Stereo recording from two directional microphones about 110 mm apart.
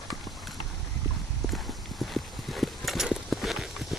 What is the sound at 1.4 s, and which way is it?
Clip-clop, centre (ahead or behind).